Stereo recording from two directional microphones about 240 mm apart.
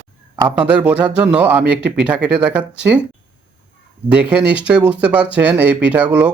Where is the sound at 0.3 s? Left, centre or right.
Centre.